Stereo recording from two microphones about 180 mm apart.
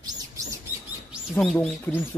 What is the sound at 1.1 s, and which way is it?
Speech, centre (ahead or behind).